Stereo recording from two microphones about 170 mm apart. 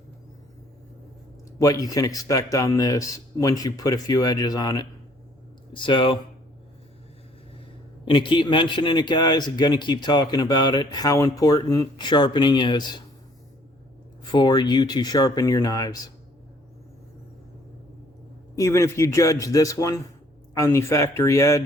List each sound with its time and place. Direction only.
1.5 s a man's voice: 20° left (ahead or behind)
8.0 s a man's voice: 30° left (ahead or behind)
14.3 s a man's voice: 25° left (ahead or behind)
18.5 s a man's voice: 20° left (ahead or behind)